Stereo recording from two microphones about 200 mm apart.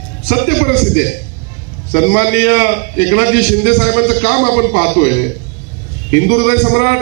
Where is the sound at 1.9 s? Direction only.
60° left (ahead or behind).